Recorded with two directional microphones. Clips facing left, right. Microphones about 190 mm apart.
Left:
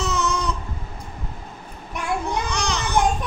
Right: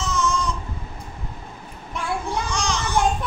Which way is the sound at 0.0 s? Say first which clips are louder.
Even; 65° left (ahead or behind).